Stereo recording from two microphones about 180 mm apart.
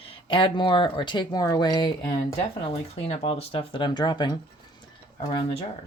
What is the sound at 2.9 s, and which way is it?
Speech, 35° left (ahead or behind).